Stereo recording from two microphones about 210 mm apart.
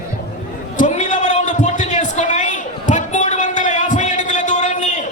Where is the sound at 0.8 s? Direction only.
35° left (ahead or behind).